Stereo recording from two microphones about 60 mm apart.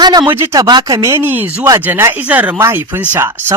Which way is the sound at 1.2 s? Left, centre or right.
Right.